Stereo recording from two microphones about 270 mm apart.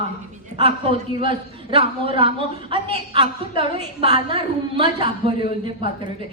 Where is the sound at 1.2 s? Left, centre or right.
Centre.